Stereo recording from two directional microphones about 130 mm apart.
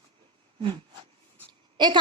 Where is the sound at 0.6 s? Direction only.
40° right (ahead or behind).